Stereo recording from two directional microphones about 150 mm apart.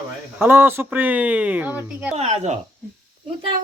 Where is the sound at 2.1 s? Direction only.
45° right (ahead or behind).